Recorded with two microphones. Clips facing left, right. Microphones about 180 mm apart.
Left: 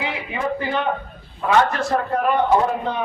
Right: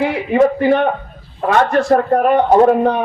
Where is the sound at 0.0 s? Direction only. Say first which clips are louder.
Right 12 dB; 55° right (ahead or behind).